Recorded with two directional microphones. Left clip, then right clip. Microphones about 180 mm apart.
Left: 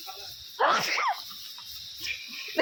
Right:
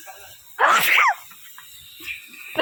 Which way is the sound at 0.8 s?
35° right (ahead or behind).